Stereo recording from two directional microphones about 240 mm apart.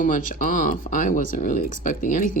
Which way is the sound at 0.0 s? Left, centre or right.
Left.